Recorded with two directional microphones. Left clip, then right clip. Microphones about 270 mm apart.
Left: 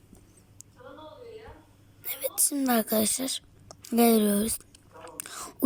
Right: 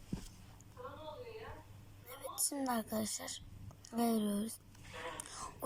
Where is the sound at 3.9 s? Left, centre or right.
Left.